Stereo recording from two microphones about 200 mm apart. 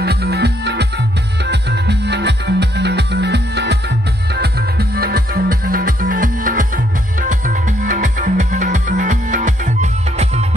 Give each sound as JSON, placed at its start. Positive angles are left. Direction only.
{"t": 0.0, "sound": "music", "side_deg": -50}